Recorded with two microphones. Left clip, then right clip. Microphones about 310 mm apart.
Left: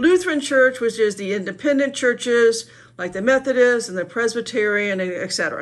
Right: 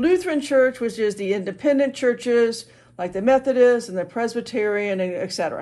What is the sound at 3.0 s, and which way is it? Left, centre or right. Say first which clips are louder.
Speech: even; right.